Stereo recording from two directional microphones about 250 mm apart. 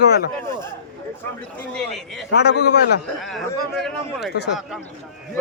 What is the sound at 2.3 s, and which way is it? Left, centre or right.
Speech, left.